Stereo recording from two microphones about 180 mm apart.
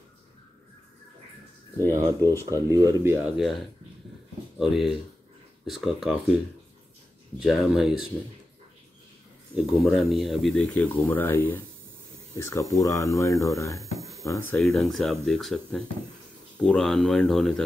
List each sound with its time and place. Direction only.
2.2 s speech: 15° right (ahead or behind)
3.3 s speech: centre (ahead or behind)
7.3 s speech: centre (ahead or behind)
9.6 s speech: centre (ahead or behind); by 13.8 s 20° left (ahead or behind)
13.9 s a sound: centre (ahead or behind)
14.2 s speech: 15° left (ahead or behind)